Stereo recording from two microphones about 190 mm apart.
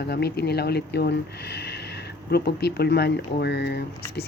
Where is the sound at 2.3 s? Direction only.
60° left (ahead or behind).